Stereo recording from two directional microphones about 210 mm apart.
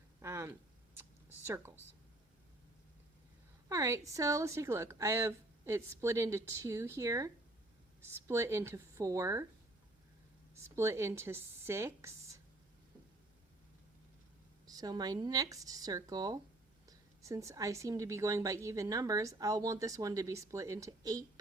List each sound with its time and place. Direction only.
0.2 s a sound: 15° right (ahead or behind)
3.7 s a woman's voice: 15° right (ahead or behind)
10.5 s a woman's voice: 15° right (ahead or behind)
14.7 s a woman's voice: 20° right (ahead or behind)